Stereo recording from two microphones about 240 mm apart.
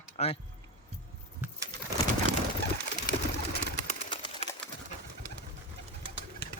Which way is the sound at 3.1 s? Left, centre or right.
Left.